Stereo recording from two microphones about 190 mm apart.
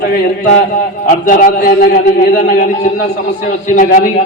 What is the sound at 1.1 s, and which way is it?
Speech, 40° left (ahead or behind).